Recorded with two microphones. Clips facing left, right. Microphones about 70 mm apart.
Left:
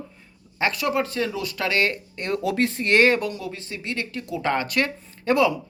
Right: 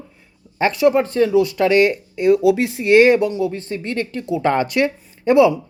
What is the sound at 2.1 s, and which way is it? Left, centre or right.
Speech, centre.